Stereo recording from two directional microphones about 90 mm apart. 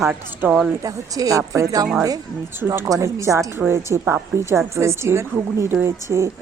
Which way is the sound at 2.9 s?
35° right (ahead or behind).